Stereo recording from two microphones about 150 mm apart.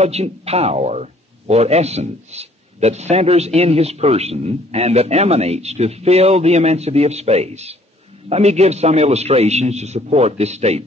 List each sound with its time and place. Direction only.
0.0 s a man's voice: 45° right (ahead or behind)